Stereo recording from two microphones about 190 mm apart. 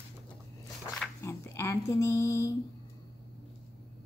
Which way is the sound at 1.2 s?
15° left (ahead or behind).